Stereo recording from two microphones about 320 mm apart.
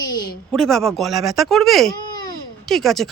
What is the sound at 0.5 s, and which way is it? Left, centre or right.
Speech, centre.